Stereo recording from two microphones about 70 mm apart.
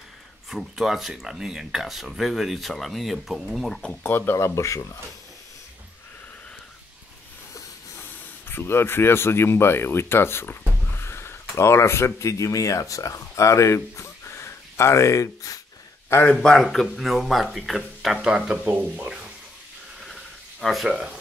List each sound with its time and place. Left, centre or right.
0.5 s speech: centre
4.0 s speech: left
4.6 s speech: left
8.5 s speech: left
16.4 s speech: centre
18.2 s speech: centre
18.7 s speech: right
20.6 s speech: centre